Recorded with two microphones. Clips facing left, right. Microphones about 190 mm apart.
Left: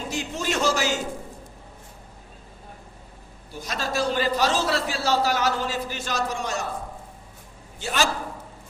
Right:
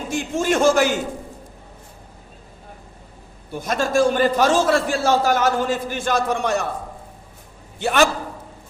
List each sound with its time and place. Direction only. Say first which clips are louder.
0.1 s a man's voice: right 8 dB; 50° right (ahead or behind)
3.5 s a man's voice: right 8 dB; 50° right (ahead or behind)
7.8 s a man's voice: right 8 dB; 60° right (ahead or behind)